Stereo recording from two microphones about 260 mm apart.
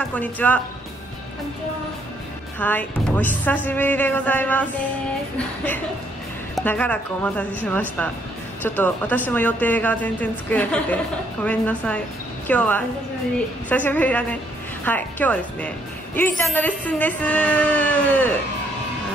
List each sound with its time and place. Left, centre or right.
0.1 s a woman's voice: centre
2.6 s a woman's voice: centre
6.5 s a woman's voice: centre